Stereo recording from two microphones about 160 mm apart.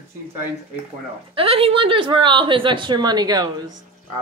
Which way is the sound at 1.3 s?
35° right (ahead or behind).